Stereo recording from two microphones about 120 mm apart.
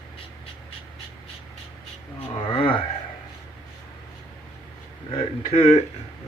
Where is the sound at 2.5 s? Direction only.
45° left (ahead or behind).